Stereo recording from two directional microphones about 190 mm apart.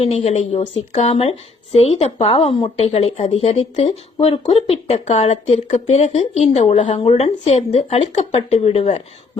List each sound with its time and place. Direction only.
0.0 s speech: 35° left (ahead or behind)